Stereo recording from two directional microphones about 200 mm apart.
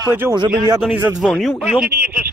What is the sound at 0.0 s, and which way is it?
Speech, 10° right (ahead or behind).